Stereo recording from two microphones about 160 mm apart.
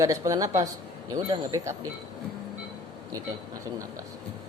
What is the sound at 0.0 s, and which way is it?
Speech, 20° right (ahead or behind).